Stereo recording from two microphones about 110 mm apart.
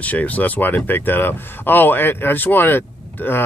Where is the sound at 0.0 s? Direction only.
15° left (ahead or behind).